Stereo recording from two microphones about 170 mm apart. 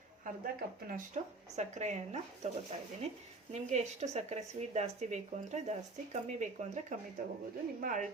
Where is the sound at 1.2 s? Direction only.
45° right (ahead or behind).